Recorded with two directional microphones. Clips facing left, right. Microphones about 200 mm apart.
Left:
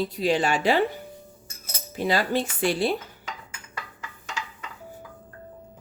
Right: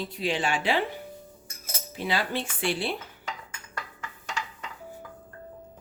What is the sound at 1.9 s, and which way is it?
Speech, 40° left (ahead or behind).